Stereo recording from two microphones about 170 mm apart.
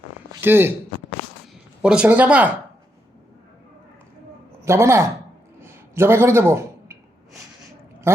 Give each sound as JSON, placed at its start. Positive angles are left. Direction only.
{"t": 0.4, "sound": "speech", "side_deg": -15}
{"t": 1.8, "sound": "speech", "side_deg": -5}
{"t": 4.6, "sound": "speech", "side_deg": -15}
{"t": 5.5, "sound": "a sound", "side_deg": -15}
{"t": 8.1, "sound": "gargling", "side_deg": -15}